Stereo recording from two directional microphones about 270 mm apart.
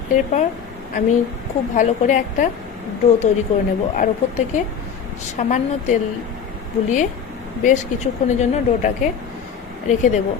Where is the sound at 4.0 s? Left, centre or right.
Left.